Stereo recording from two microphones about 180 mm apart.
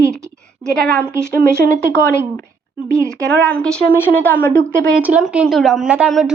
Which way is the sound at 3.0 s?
5° left (ahead or behind).